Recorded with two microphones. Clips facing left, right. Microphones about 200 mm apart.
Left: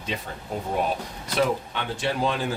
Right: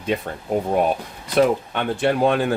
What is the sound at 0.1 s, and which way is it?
Speech, 55° right (ahead or behind).